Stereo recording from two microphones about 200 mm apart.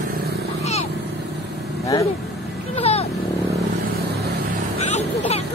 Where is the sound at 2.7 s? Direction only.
30° left (ahead or behind).